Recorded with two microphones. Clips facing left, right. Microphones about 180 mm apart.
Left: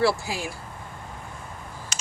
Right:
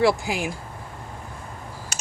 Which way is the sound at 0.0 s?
15° right (ahead or behind).